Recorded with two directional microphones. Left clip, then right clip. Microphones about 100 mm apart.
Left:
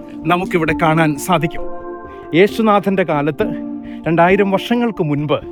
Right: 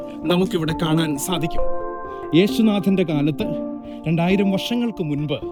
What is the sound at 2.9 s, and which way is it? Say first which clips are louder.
Speech: left 5 dB; 30° right (ahead or behind).